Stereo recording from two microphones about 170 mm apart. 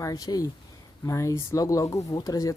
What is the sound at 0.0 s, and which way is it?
Speech, 20° left (ahead or behind).